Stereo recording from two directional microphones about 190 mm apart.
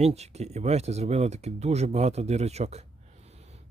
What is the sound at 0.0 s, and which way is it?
Speech, 35° right (ahead or behind).